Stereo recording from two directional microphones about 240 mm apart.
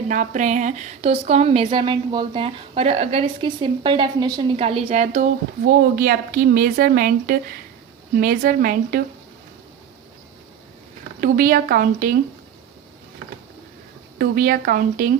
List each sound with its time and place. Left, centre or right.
0.1 s speech: right
11.2 s speech: right
14.2 s speech: right